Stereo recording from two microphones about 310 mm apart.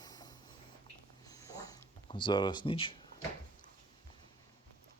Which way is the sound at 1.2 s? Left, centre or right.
Centre.